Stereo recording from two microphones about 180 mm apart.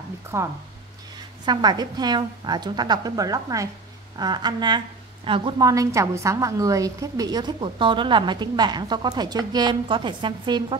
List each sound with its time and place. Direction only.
0.3 s a woman's voice: 15° right (ahead or behind)